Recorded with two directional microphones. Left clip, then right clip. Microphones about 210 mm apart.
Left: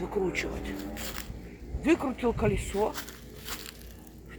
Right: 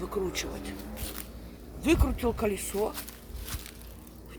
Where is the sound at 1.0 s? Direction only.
20° left (ahead or behind).